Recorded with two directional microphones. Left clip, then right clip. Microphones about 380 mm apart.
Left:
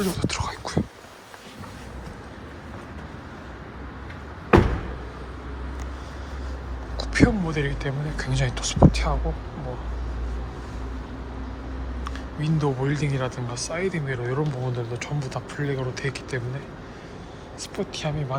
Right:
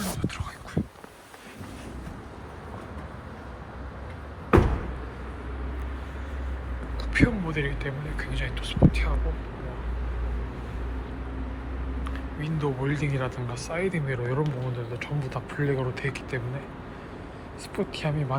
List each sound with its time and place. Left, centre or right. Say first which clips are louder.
0.3 s whispering: left 9 dB; centre
4.5 s a sound: left 3 dB; centre
6.9 s speech: left 4 dB; centre
12.0 s speech: left 5 dB; centre
17.7 s speech: even; centre